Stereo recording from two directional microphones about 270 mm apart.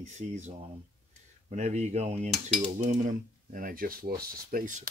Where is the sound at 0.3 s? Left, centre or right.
Right.